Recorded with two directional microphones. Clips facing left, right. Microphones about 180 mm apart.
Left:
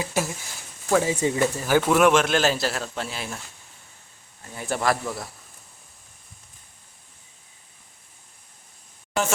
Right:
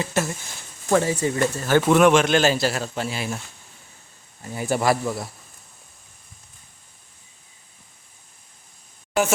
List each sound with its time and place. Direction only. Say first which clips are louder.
0.0 s speech: right 2 dB; 5° left (ahead or behind)
1.0 s speech: even; 20° left (ahead or behind)
1.4 s speech: right 3 dB; 10° left (ahead or behind)
4.5 s speech: right 3 dB; 5° right (ahead or behind)